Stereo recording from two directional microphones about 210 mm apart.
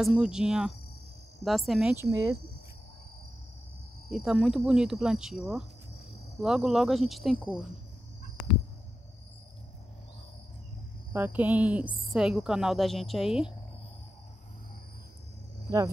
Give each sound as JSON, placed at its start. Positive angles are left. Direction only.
{"t": 0.0, "sound": "speech", "side_deg": -5}
{"t": 2.0, "sound": "speech", "side_deg": -15}
{"t": 4.1, "sound": "speech", "side_deg": 0}
{"t": 11.1, "sound": "speech", "side_deg": -10}